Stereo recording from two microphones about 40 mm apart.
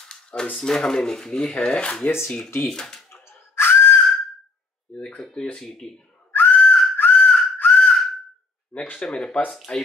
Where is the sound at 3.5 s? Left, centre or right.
Left.